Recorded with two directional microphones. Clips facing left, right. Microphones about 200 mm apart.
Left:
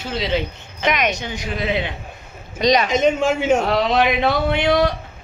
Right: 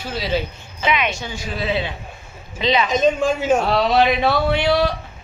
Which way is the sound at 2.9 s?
25° left (ahead or behind).